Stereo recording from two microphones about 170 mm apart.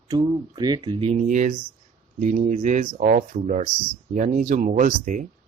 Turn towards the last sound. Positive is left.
turn(degrees=-50)  # may be behind; listen again after turning